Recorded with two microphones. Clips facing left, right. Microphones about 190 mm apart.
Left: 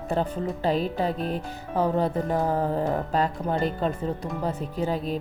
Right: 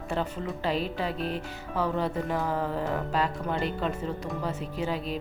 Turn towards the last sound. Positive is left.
turn(degrees=40)  # may be behind; listen again after turning